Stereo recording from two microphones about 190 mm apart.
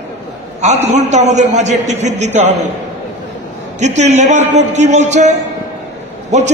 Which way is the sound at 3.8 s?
35° right (ahead or behind).